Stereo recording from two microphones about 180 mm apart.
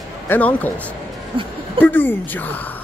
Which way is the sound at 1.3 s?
30° right (ahead or behind).